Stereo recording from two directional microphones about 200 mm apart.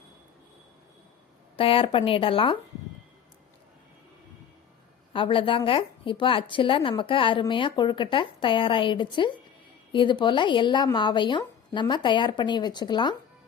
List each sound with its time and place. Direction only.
1.5 s a woman's voice: 25° left (ahead or behind)
5.1 s a woman's voice: 25° left (ahead or behind)